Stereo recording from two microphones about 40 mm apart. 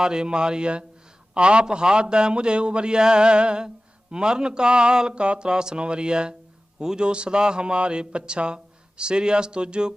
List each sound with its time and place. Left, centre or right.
0.0 s speech: centre